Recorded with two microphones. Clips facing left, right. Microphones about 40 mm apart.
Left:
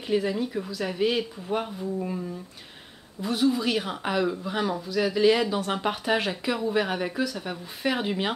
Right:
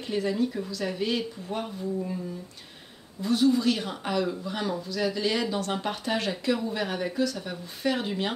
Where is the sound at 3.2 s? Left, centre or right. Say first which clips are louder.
Right 1 dB; centre.